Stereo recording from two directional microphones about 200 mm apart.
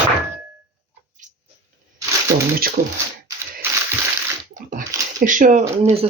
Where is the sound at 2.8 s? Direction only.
45° right (ahead or behind).